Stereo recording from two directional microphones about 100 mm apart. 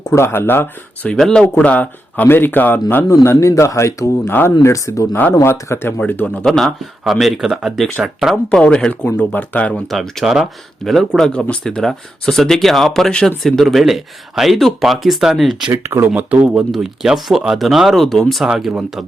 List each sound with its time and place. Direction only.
0.1 s speech: 25° left (ahead or behind)
1.1 s speech: 5° left (ahead or behind)
6.4 s speech: 5° left (ahead or behind)
8.4 s speech: 10° left (ahead or behind)
9.9 s speech: centre (ahead or behind)
15.7 s speech: 25° right (ahead or behind); by 18.4 s centre (ahead or behind)
18.4 s speech: 10° right (ahead or behind)